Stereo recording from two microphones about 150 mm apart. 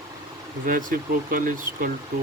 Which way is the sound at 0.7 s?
65° right (ahead or behind).